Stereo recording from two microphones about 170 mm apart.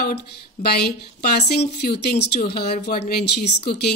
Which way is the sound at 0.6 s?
70° left (ahead or behind).